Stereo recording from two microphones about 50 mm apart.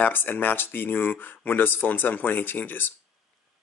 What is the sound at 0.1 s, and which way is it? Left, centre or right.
Speech, left.